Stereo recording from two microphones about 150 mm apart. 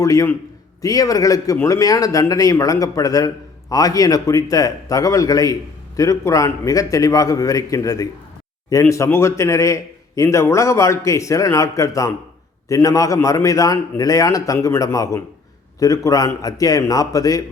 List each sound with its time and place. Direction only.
0.0 s a man's voice: 20° left (ahead or behind)